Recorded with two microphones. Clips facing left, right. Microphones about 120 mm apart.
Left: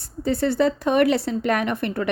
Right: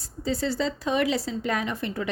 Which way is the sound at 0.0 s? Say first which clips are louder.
Left 5 dB; 60° left (ahead or behind).